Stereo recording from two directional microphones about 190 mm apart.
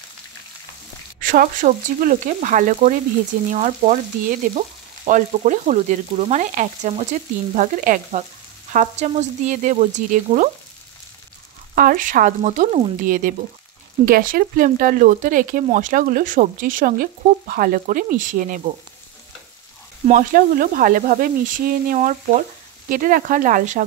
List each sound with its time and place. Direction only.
1.2 s speech: 45° right (ahead or behind)
3.4 s frying: 40° right (ahead or behind)
11.7 s speech: 50° right (ahead or behind)
20.1 s speech: 45° right (ahead or behind)